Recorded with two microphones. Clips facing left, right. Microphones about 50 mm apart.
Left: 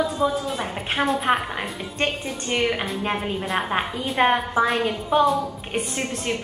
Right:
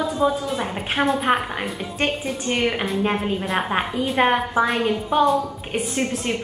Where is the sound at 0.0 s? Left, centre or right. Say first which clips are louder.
Right 1 dB; centre.